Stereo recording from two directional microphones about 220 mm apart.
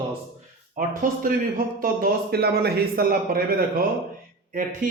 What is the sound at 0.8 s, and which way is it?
Speech, 40° right (ahead or behind).